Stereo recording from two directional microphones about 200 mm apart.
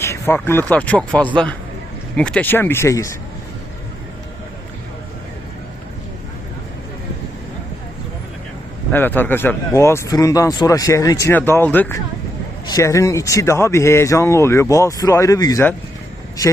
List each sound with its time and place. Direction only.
0.0 s speech: 15° left (ahead or behind)
8.9 s speech: 10° left (ahead or behind)